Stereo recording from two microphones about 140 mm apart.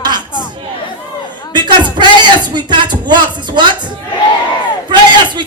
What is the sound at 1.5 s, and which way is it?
Speech, 30° right (ahead or behind).